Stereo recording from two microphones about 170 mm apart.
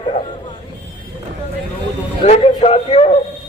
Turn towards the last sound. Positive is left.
turn(degrees=35)  # may be behind; listen again after turning